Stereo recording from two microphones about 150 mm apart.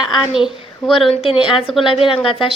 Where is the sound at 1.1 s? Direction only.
40° left (ahead or behind).